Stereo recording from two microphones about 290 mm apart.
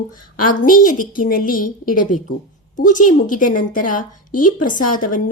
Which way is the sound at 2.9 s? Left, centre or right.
Left.